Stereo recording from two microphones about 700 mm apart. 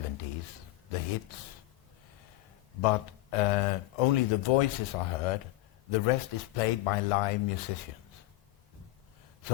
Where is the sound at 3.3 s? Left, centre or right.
Left.